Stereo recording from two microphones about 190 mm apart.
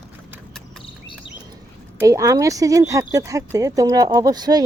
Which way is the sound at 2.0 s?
15° right (ahead or behind).